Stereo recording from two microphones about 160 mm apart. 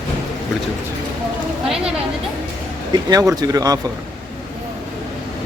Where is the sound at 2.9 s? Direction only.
25° right (ahead or behind).